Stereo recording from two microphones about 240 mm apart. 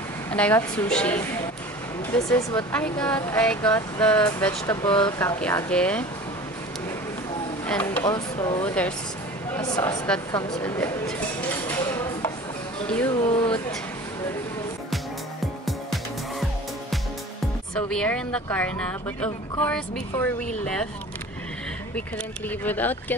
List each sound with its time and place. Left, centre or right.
0.3 s speech: centre
7.6 s speech: centre
13.1 s speech: centre
15.6 s music: centre
17.7 s speech: centre
22.5 s speech: centre